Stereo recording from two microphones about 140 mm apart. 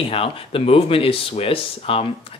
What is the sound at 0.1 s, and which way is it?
Speech, 40° left (ahead or behind).